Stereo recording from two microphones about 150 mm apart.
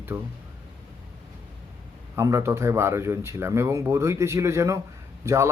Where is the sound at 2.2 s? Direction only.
20° right (ahead or behind).